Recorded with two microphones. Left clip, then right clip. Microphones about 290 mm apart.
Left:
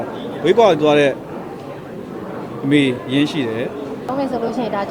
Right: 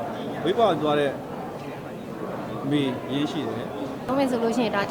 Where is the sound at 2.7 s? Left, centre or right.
Left.